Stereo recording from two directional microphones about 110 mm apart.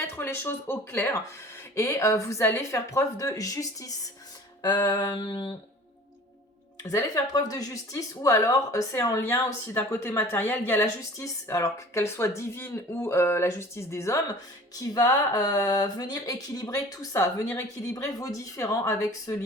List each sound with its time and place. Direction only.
0.2 s speech: 20° left (ahead or behind); by 5.5 s 45° left (ahead or behind)
6.8 s speech: 35° left (ahead or behind)
17.5 s speech: 20° left (ahead or behind)
17.9 s speech: 30° left (ahead or behind)